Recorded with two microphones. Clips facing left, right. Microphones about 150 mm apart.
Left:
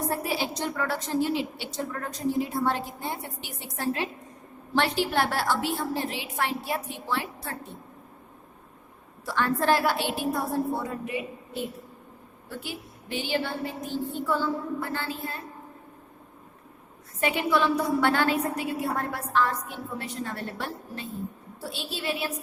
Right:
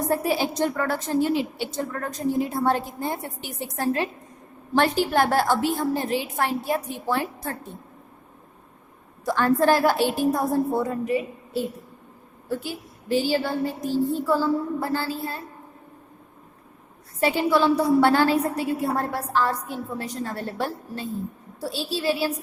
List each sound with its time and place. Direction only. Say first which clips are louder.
0.3 s a woman's voice: right 6 dB; 45° right (ahead or behind)
9.2 s a woman's voice: right 5 dB; 40° right (ahead or behind)
17.2 s a woman's voice: right 4 dB; 35° right (ahead or behind)